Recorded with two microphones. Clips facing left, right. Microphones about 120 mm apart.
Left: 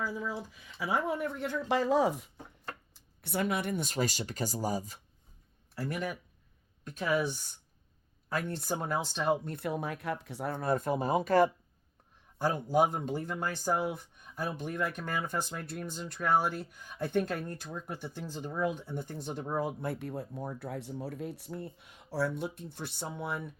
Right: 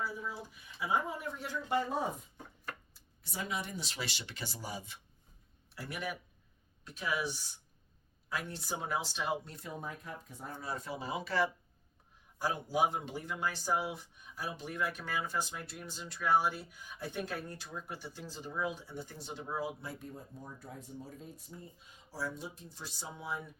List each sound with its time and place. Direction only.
0.0 s speech: 90° left
3.2 s speech: 60° left (ahead or behind); by 4.9 s 40° left (ahead or behind)
6.8 s speech: 50° left (ahead or behind)
12.7 s speech: 45° left (ahead or behind); by 23.4 s 60° left (ahead or behind)